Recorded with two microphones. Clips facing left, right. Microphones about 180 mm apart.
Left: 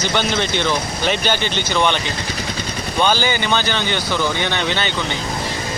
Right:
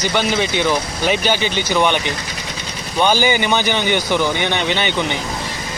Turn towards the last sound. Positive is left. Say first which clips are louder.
# right 2 dB
turn(degrees=-15)  # may be behind; listen again after turning